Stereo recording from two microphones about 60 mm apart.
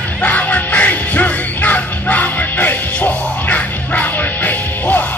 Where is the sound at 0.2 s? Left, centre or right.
Left.